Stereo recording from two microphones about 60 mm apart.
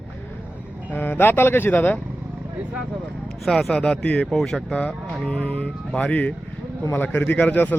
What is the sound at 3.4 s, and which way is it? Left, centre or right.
Speech, centre.